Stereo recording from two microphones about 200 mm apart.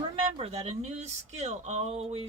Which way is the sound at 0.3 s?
30° right (ahead or behind).